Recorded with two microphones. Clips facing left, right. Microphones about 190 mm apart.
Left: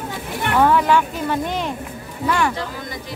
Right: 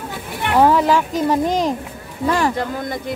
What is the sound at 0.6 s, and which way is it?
Speech, 35° right (ahead or behind).